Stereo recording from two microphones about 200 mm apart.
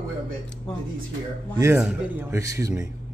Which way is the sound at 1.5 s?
15° right (ahead or behind).